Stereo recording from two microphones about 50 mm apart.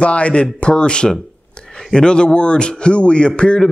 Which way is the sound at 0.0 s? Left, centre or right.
Left.